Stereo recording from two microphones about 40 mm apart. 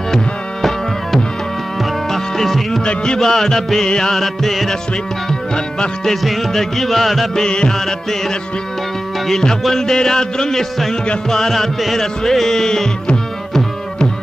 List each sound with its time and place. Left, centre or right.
0.1 s music: centre
2.8 s music: left
3.2 s music: centre
4.2 s music: centre
7.3 s music: centre
9.3 s music: centre